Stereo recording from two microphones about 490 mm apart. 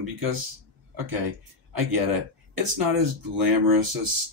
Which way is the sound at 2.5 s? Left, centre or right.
Right.